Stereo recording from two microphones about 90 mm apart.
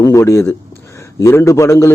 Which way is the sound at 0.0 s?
35° left (ahead or behind).